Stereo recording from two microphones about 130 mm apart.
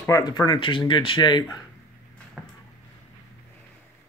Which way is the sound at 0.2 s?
35° left (ahead or behind).